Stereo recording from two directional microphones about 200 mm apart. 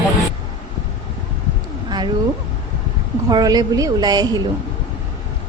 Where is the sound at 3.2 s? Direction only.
20° right (ahead or behind).